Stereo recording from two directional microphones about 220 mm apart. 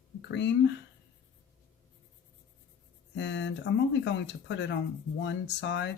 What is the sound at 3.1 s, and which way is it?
Speech, 55° left (ahead or behind).